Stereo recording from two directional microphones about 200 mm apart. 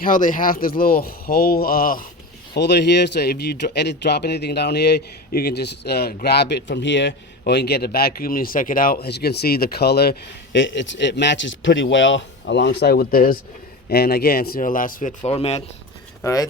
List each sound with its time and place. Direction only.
0.0 s speech: 40° left (ahead or behind)
2.6 s speech: 60° left (ahead or behind); by 15.1 s 45° left (ahead or behind)
15.2 s speech: 30° left (ahead or behind)
16.2 s speech: 15° left (ahead or behind)